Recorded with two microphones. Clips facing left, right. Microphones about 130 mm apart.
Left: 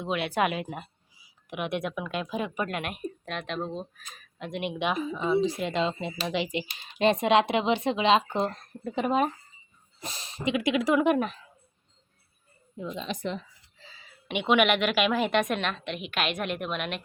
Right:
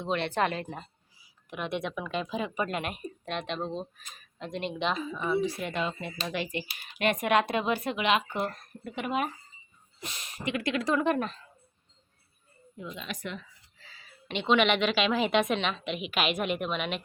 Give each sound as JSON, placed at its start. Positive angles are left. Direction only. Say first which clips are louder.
{"t": 0.0, "sound": "speech", "louder": "left 1 dB", "side_deg": 10}
{"t": 10.4, "sound": "speech", "louder": "left 4 dB", "side_deg": 15}
{"t": 13.0, "sound": "speech", "louder": "left 6 dB", "side_deg": 30}